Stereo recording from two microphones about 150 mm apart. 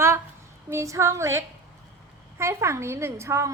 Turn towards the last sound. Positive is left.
turn(degrees=-20)  # may be behind; listen again after turning